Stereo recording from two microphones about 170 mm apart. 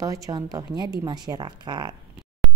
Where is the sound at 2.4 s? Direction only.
5° left (ahead or behind).